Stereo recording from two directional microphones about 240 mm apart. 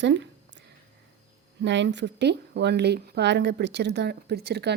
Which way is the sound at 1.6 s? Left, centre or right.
Right.